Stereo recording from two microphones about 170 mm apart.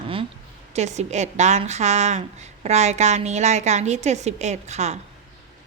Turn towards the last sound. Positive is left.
turn(degrees=-40)  # may be behind; listen again after turning